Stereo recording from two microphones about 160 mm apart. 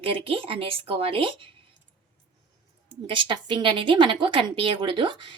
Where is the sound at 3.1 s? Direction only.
30° right (ahead or behind).